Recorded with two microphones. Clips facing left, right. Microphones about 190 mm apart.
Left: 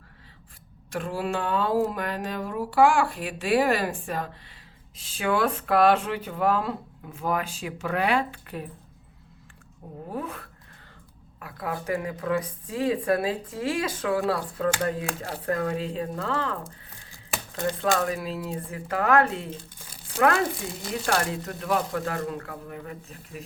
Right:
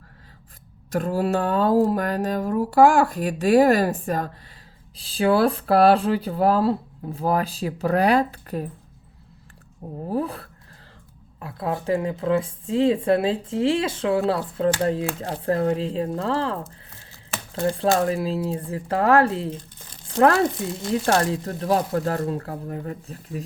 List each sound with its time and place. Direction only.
0.9 s speech: 40° right (ahead or behind)
10.1 s a woman's voice: 35° right (ahead or behind)
16.6 s typing: 15° left (ahead or behind)
17.5 s speech: 35° right (ahead or behind)
21.1 s speech: 30° right (ahead or behind)